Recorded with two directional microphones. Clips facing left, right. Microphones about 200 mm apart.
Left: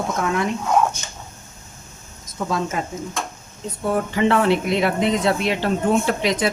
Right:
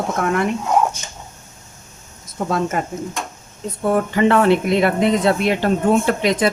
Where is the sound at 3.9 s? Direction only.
50° right (ahead or behind).